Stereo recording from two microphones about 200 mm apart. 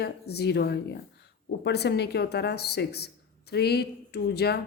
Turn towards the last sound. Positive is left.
turn(degrees=55)  # may be behind; listen again after turning